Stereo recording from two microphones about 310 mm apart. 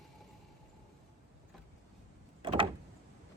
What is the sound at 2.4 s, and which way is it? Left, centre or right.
Door, centre.